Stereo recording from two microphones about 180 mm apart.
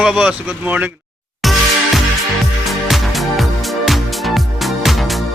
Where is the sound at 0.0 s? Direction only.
5° right (ahead or behind).